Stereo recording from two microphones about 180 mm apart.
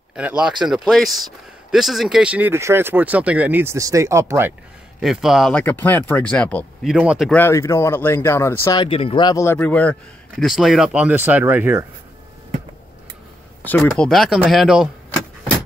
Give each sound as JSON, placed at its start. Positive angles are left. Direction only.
{"t": 0.1, "sound": "speech", "side_deg": -5}
{"t": 5.0, "sound": "speech", "side_deg": 0}
{"t": 7.3, "sound": "speech", "side_deg": 15}
{"t": 8.8, "sound": "speech", "side_deg": 30}
{"t": 13.7, "sound": "speech", "side_deg": 5}